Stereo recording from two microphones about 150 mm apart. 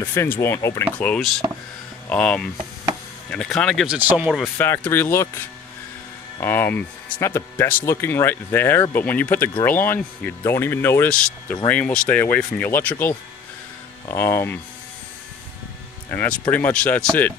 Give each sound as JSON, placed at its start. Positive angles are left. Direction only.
{"t": 0.0, "sound": "speech", "side_deg": 15}
{"t": 1.4, "sound": "speech", "side_deg": -35}
{"t": 2.0, "sound": "speech", "side_deg": 5}
{"t": 3.8, "sound": "speech", "side_deg": -10}
{"t": 4.6, "sound": "speech", "side_deg": 15}
{"t": 6.4, "sound": "speech", "side_deg": 15}
{"t": 16.1, "sound": "speech", "side_deg": 10}